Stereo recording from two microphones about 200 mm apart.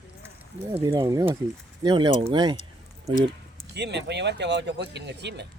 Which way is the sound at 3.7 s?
55° right (ahead or behind).